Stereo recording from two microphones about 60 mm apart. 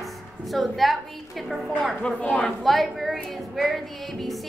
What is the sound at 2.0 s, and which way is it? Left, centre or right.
Speech, centre.